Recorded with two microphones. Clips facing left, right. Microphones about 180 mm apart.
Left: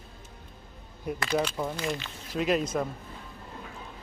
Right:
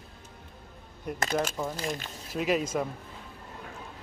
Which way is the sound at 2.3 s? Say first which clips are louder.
Left 1 dB; 5° right (ahead or behind).